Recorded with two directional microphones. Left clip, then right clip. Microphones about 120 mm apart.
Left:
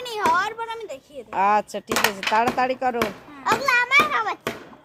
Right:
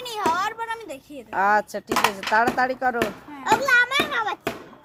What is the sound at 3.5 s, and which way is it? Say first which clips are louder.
Children playing: right 1 dB; 40° left (ahead or behind).